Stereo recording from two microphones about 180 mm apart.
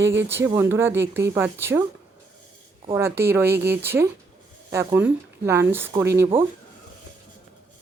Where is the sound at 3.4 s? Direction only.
65° right (ahead or behind).